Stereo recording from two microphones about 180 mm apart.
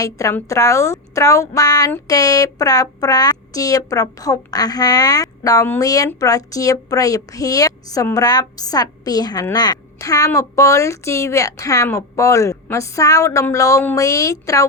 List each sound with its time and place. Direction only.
0.0 s a woman's voice: 15° left (ahead or behind)